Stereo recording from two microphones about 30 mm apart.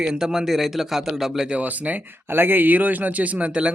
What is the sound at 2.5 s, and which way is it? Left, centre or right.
Speech, right.